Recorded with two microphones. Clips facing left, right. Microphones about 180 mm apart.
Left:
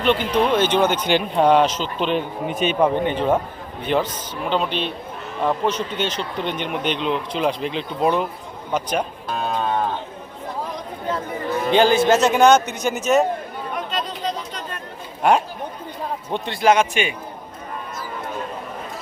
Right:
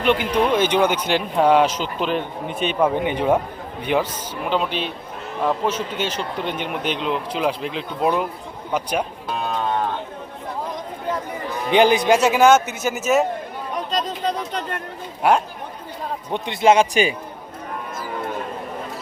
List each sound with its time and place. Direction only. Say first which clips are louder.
0.0 s speech: even; 10° right (ahead or behind)
2.9 s speech: even; 10° right (ahead or behind)
11.7 s speech: even; 15° right (ahead or behind); by 13.2 s centre (ahead or behind)
13.9 s chatter: right 4 dB; 40° right (ahead or behind)
14.3 s chatter: right 3 dB; 60° right (ahead or behind)
15.2 s speech: even; 5° right (ahead or behind)
16.3 s speech: right 2 dB; 20° right (ahead or behind)
16.9 s a man's voice: right 4 dB; 35° right (ahead or behind)